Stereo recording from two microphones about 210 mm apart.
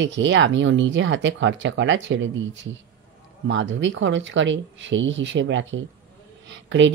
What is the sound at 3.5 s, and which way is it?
Speech, 60° right (ahead or behind).